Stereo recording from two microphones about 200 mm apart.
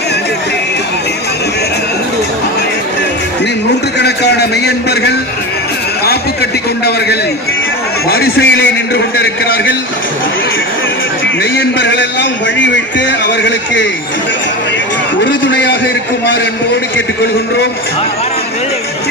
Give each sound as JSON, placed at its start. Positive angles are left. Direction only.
{"t": 3.9, "sound": "a sound", "side_deg": 55}
{"t": 8.1, "sound": "a man's voice", "side_deg": 55}
{"t": 11.5, "sound": "a man's voice", "side_deg": 65}